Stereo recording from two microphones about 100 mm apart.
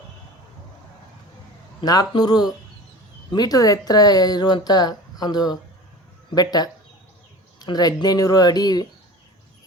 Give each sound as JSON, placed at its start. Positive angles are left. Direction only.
{"t": 1.8, "sound": "speech", "side_deg": 40}